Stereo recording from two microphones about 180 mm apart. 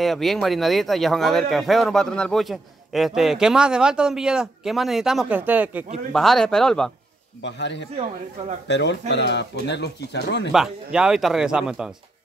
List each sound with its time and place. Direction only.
0.0 s speech: centre (ahead or behind)
6.1 s speech: centre (ahead or behind)
7.4 s speech: 75° left (ahead or behind)
10.5 s speech: 5° right (ahead or behind)